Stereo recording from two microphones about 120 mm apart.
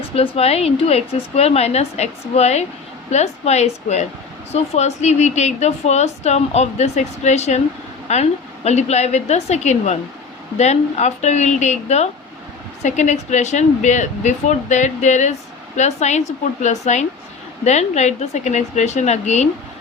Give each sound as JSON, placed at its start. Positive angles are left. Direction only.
{"t": 0.1, "sound": "a woman's voice", "side_deg": 55}